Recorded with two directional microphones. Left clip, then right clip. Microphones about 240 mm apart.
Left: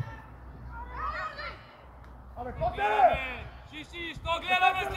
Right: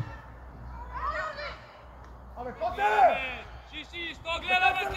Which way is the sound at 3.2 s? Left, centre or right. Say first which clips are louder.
Right 2 dB; left.